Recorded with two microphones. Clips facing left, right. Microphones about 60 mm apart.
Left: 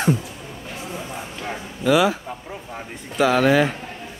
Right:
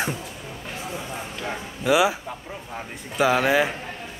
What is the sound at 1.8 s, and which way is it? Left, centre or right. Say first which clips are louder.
Speech: left 2 dB; centre.